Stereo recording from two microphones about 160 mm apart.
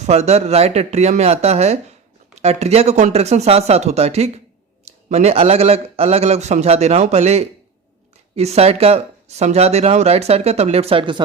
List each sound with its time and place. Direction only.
0.0 s speech: 40° right (ahead or behind)